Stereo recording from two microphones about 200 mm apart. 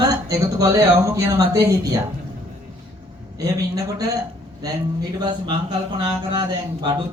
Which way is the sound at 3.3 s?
20° right (ahead or behind).